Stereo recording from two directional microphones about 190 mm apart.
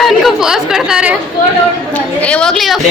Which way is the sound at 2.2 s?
5° left (ahead or behind).